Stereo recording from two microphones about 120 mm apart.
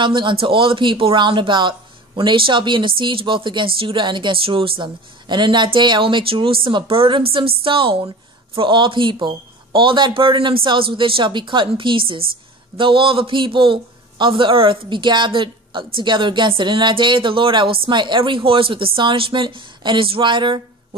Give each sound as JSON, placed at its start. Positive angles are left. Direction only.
{"t": 0.0, "sound": "speech", "side_deg": -45}